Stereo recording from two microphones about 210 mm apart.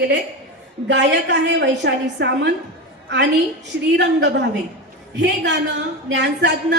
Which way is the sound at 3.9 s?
55° right (ahead or behind).